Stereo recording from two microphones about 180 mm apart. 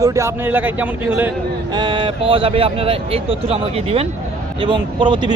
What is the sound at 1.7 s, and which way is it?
A man's voice, 25° right (ahead or behind).